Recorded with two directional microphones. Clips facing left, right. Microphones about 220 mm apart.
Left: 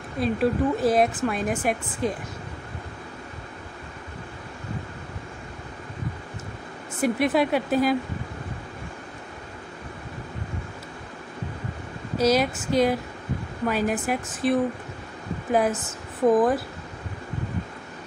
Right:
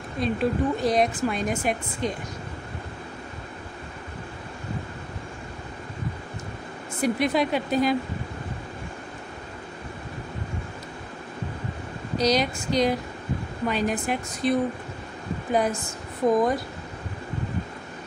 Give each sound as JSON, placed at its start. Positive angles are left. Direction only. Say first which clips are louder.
{"t": 0.2, "sound": "a woman's voice", "louder": "left 2 dB", "side_deg": 5}
{"t": 7.0, "sound": "a woman's voice", "louder": "left 1 dB", "side_deg": 5}
{"t": 12.2, "sound": "a woman's voice", "louder": "left 2 dB", "side_deg": 5}